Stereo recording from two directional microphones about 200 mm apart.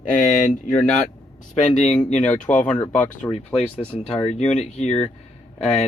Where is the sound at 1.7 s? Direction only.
35° left (ahead or behind).